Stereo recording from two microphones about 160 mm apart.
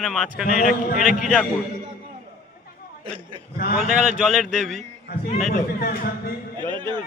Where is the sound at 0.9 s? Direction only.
Centre (ahead or behind).